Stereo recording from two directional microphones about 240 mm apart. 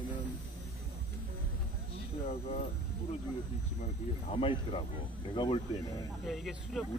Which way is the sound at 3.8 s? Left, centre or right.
Left.